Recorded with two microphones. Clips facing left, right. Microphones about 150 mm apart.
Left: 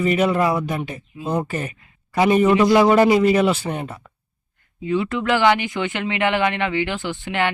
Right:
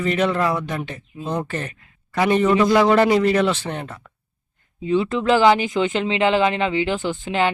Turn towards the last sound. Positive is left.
turn(degrees=-20)  # may be behind; listen again after turning